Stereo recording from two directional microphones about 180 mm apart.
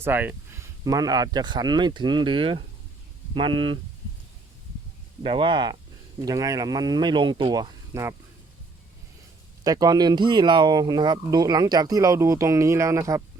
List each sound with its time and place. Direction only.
0.0 s speech: 10° right (ahead or behind)
0.9 s speech: 20° right (ahead or behind)
5.2 s speech: 30° right (ahead or behind)
9.6 s speech: 20° right (ahead or behind)